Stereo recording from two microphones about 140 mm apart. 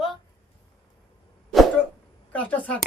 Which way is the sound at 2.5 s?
10° left (ahead or behind).